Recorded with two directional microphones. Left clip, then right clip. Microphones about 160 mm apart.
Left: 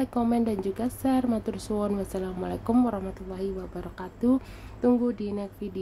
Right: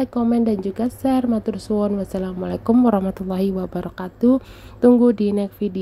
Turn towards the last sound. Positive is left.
turn(degrees=-45)  # may be behind; listen again after turning